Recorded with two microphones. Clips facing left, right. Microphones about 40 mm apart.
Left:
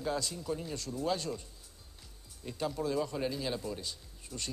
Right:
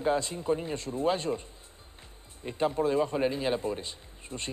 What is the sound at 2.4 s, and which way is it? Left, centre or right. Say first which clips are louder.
A man's voice: right 7 dB; right.